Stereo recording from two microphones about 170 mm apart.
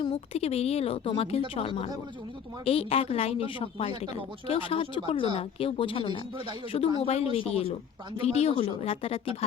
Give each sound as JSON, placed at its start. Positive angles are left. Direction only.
{"t": 0.1, "sound": "speech", "side_deg": 40}
{"t": 6.3, "sound": "speech", "side_deg": -30}
{"t": 6.7, "sound": "speech", "side_deg": 35}